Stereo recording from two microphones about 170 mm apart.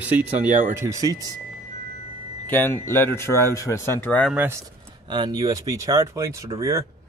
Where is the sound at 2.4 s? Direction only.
10° left (ahead or behind).